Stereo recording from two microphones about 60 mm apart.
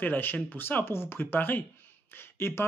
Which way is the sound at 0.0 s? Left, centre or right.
Left.